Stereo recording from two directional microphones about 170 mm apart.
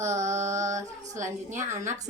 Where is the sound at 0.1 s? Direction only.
15° right (ahead or behind).